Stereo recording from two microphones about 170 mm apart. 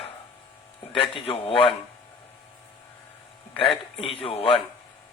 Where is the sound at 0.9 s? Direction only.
35° left (ahead or behind).